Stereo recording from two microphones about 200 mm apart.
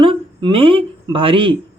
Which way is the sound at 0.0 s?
25° right (ahead or behind).